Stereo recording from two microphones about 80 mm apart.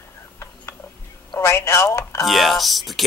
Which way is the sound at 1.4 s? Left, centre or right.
Left.